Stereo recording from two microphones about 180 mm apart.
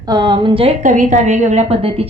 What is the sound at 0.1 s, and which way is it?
A woman's voice, 25° right (ahead or behind).